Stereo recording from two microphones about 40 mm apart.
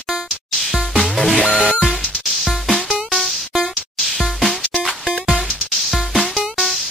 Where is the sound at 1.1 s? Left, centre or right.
Centre.